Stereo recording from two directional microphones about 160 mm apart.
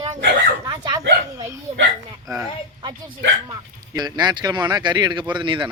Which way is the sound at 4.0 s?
25° right (ahead or behind).